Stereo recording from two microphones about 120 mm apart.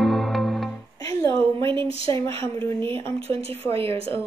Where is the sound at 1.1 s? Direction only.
25° left (ahead or behind).